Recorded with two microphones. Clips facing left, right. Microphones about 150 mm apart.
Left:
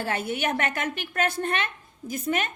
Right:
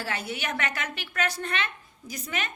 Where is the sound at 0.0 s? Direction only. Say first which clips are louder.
Left 5 dB; 50° left (ahead or behind).